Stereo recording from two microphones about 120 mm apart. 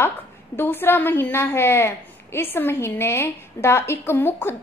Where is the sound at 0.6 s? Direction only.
15° left (ahead or behind).